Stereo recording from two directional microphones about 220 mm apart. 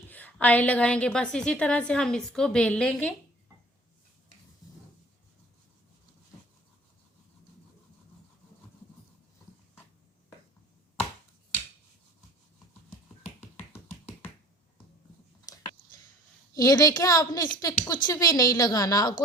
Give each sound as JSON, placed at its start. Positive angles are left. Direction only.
{"t": 0.1, "sound": "a woman's voice", "side_deg": 5}
{"t": 15.5, "sound": "a sound", "side_deg": 15}
{"t": 16.6, "sound": "a woman's voice", "side_deg": 15}